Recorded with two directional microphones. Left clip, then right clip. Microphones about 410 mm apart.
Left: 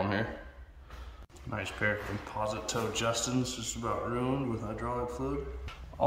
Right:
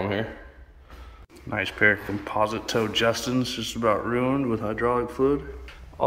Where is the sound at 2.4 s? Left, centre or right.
Centre.